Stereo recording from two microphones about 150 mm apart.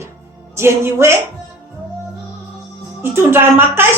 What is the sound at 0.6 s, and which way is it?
Speech, 15° right (ahead or behind).